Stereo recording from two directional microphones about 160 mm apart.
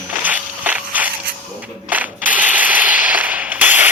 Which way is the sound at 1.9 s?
10° right (ahead or behind).